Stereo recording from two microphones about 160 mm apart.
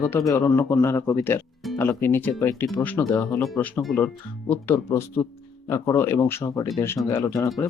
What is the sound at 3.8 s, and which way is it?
Speech, centre (ahead or behind).